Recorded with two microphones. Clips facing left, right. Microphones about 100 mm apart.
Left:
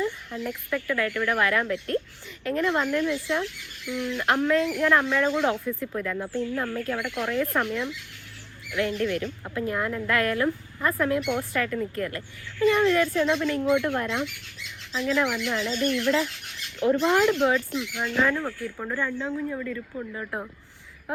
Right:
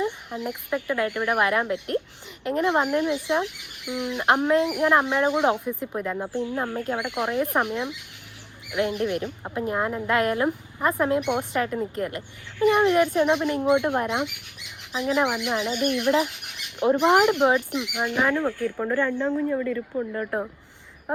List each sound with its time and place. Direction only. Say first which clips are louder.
0.0 s a woman's voice: right 1 dB; 20° right (ahead or behind)